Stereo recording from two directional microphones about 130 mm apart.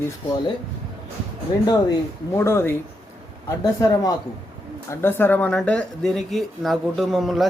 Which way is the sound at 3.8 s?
25° left (ahead or behind).